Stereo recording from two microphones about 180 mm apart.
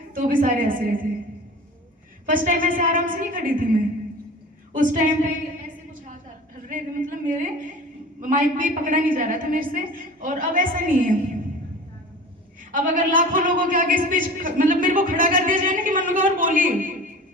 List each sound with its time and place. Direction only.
0.1 s a man's voice: 50° right (ahead or behind)
2.3 s a man's voice: 50° right (ahead or behind)
6.7 s a woman's voice: 45° right (ahead or behind)
12.7 s a man's voice: 50° right (ahead or behind)